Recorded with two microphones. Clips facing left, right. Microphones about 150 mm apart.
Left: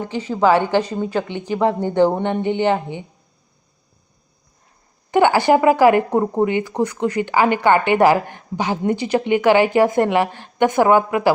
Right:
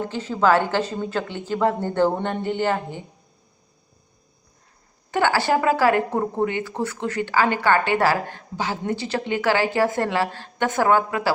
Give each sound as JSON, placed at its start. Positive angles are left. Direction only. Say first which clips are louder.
{"t": 0.0, "sound": "a woman's voice", "louder": "left 3 dB", "side_deg": 15}
{"t": 5.1, "sound": "a woman's voice", "louder": "left 6 dB", "side_deg": 15}